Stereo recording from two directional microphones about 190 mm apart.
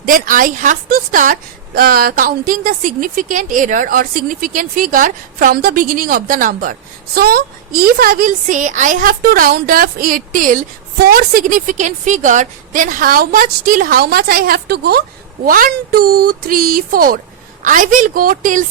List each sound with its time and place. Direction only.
0.0 s a woman's voice: 45° right (ahead or behind)